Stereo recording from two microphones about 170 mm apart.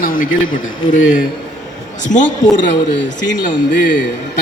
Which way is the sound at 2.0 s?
45° left (ahead or behind).